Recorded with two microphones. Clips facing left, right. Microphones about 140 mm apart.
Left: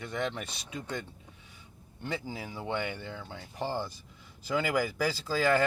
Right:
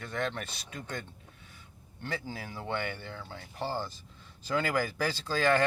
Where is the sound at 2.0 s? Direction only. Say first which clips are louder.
Left 1 dB; 15° left (ahead or behind).